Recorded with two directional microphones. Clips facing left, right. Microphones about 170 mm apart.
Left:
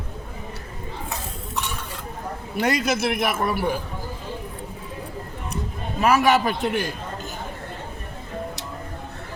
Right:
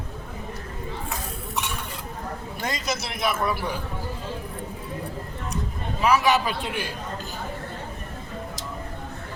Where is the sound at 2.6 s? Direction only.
60° left (ahead or behind).